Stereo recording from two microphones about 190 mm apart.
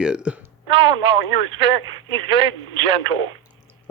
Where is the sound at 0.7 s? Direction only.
30° right (ahead or behind).